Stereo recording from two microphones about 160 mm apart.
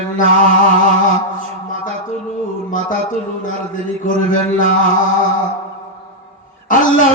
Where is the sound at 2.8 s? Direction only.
55° left (ahead or behind).